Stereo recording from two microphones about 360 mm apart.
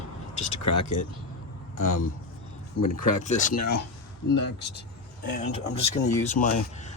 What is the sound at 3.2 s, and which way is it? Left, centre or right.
Speech, centre.